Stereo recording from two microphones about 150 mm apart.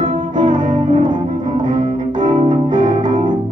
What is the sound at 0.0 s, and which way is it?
Music, 60° right (ahead or behind).